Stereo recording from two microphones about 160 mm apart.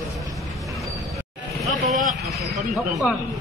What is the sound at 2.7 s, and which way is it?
Speech, centre (ahead or behind).